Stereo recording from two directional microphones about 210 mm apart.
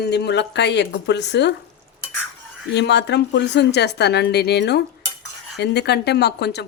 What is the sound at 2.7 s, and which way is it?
Speech, 55° left (ahead or behind).